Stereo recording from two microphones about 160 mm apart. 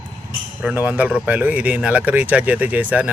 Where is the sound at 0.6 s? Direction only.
10° right (ahead or behind).